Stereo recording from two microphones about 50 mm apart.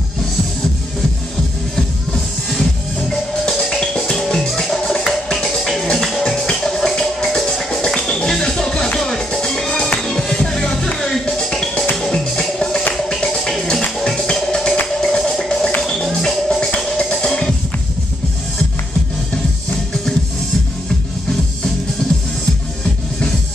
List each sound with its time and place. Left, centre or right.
2.5 s music: centre